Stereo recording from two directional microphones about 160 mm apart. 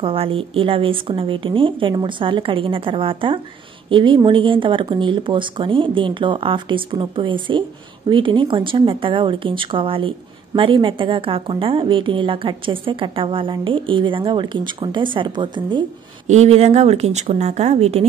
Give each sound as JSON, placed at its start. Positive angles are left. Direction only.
{"t": 0.0, "sound": "speech", "side_deg": -35}
{"t": 16.3, "sound": "speech", "side_deg": -40}